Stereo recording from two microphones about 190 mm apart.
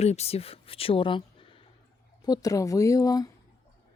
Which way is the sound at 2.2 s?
20° left (ahead or behind).